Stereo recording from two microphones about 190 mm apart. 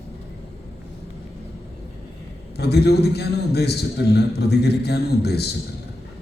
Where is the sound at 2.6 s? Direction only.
60° left (ahead or behind).